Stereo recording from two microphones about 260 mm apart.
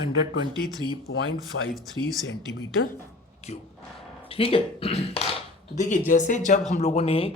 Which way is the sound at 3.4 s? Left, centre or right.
Left.